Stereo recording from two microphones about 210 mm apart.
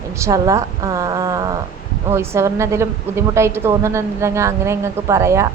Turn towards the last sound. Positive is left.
turn(degrees=-15)  # may be behind; listen again after turning